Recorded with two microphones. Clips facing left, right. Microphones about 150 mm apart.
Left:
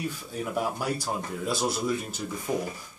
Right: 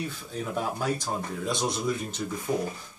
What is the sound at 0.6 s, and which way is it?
Speech, 10° left (ahead or behind).